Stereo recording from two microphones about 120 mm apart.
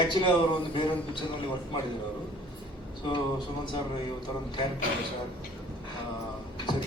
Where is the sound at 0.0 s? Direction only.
40° left (ahead or behind).